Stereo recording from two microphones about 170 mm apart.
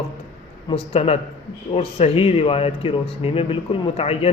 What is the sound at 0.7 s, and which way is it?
A man's voice, 35° left (ahead or behind).